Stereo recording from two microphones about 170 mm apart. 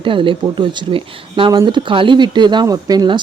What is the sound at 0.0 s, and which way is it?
Speech, 30° right (ahead or behind).